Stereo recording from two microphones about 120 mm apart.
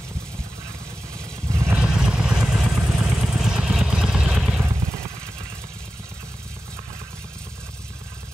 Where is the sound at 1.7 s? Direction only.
5° right (ahead or behind).